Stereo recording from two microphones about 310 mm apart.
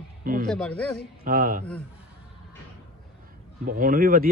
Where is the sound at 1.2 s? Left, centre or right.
Right.